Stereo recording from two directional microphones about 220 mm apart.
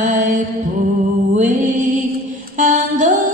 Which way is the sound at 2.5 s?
35° right (ahead or behind).